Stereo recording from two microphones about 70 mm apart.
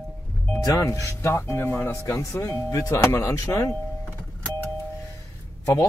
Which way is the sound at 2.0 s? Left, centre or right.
Left.